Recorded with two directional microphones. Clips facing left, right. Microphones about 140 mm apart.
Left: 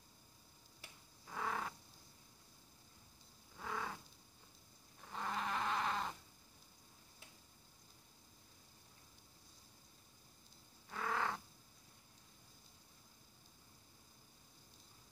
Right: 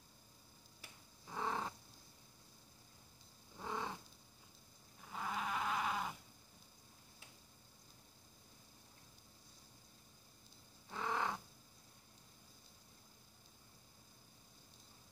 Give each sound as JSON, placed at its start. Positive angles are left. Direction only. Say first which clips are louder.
{"t": 1.2, "sound": "cat", "louder": "right 1 dB", "side_deg": -25}
{"t": 3.5, "sound": "a sound", "louder": "right 1 dB", "side_deg": -25}
{"t": 5.0, "sound": "sheep", "louder": "even", "side_deg": -5}
{"t": 10.9, "sound": "crow", "louder": "even", "side_deg": -20}